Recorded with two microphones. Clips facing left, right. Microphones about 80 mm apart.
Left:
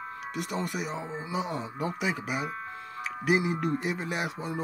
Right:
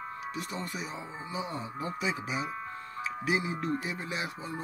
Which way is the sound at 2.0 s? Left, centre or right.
Left.